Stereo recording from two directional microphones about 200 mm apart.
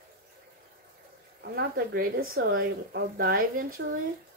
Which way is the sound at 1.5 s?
50° right (ahead or behind).